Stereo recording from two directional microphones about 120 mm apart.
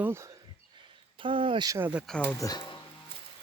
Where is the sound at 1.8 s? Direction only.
10° right (ahead or behind).